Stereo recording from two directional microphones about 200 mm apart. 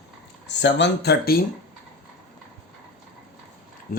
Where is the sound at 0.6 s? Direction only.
60° left (ahead or behind).